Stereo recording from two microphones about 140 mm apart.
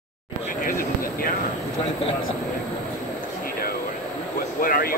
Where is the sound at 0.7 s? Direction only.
90° left.